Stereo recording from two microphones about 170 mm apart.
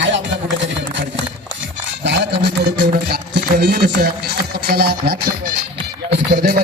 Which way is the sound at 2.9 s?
70° right (ahead or behind).